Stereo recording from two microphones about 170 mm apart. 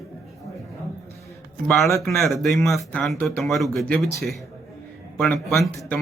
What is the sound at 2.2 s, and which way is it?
Speech, centre (ahead or behind).